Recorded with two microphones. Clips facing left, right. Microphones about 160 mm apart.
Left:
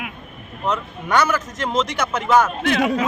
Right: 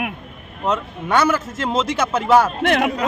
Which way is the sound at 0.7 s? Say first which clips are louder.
Right 1 dB; 25° right (ahead or behind).